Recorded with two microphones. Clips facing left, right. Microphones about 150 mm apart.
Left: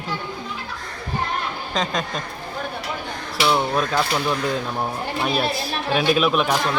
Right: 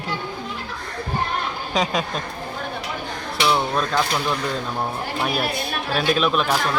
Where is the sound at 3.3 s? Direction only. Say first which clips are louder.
Left 1 dB; 5° left (ahead or behind).